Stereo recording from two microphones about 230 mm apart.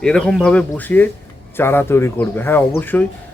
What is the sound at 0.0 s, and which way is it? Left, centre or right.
A man's voice, centre.